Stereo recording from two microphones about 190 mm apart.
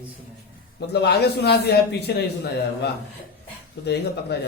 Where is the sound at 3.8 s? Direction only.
60° left (ahead or behind).